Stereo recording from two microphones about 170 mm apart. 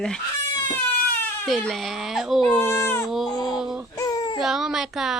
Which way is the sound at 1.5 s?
Centre (ahead or behind).